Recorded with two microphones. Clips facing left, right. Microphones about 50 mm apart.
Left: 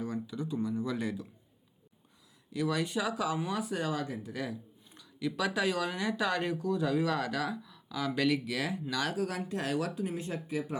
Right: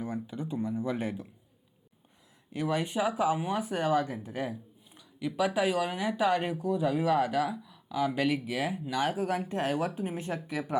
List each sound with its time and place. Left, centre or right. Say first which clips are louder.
0.0 s speech: right 1 dB; right
2.5 s speech: right 1 dB; right
4.9 s speech: right 3 dB; centre; by 10.8 s right